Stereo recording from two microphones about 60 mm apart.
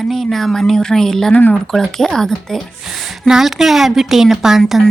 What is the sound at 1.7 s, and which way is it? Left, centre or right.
Speech, centre.